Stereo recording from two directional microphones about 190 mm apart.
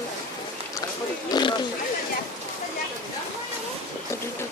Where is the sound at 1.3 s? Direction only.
25° left (ahead or behind).